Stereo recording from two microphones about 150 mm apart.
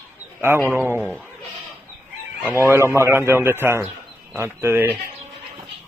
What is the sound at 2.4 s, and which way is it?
A man's voice, 15° right (ahead or behind).